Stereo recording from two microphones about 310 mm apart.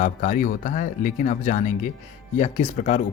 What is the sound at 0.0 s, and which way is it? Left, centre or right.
Speech, left.